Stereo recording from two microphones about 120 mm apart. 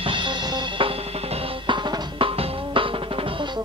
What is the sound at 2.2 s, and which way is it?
Music, 50° right (ahead or behind).